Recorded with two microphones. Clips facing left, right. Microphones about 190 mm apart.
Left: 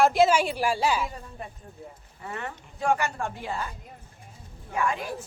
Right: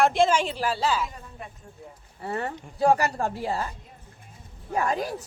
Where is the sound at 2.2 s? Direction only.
35° right (ahead or behind).